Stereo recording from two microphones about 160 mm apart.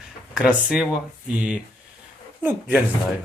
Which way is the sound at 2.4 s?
10° right (ahead or behind).